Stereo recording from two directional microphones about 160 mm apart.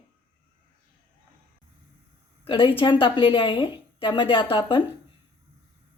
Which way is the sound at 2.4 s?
30° left (ahead or behind).